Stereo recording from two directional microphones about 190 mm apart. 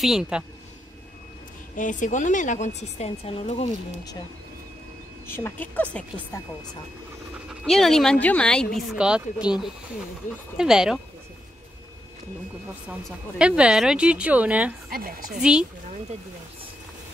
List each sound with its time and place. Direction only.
0.0 s speech: 5° right (ahead or behind)
1.8 s a woman's voice: 40° left (ahead or behind)
5.3 s a woman's voice: 10° left (ahead or behind)
7.4 s speech: centre (ahead or behind)
12.8 s speech: 5° right (ahead or behind)
14.9 s speech: 50° right (ahead or behind)